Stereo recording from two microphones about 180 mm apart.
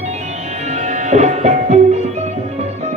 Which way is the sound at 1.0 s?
40° right (ahead or behind).